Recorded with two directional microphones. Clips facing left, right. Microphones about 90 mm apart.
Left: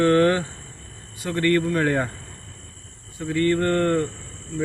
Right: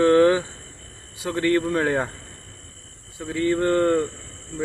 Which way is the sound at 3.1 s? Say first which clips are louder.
Left 1 dB; 10° right (ahead or behind).